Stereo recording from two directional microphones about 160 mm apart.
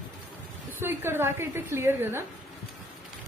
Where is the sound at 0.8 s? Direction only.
15° right (ahead or behind).